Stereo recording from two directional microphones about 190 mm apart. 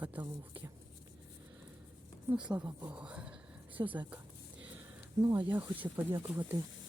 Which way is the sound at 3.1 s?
5° right (ahead or behind).